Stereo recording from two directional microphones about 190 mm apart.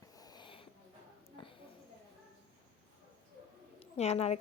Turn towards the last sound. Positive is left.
turn(degrees=35)  # may be behind; listen again after turning